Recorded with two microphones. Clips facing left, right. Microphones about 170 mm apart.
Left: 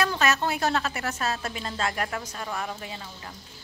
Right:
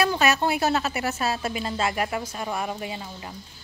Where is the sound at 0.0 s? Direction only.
10° right (ahead or behind).